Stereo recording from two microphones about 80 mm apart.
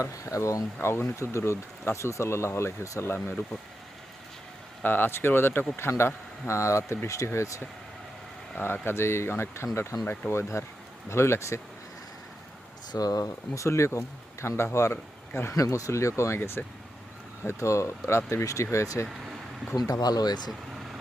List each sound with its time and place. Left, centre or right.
0.0 s speech: left
4.8 s speech: left
8.5 s speech: left
12.9 s speech: left
13.7 s speech: left
15.5 s speech: left
19.9 s speech: left